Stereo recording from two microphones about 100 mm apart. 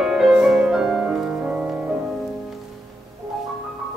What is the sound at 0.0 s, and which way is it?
Music, 5° right (ahead or behind).